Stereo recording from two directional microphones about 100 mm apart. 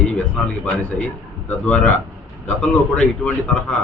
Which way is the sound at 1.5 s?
15° left (ahead or behind).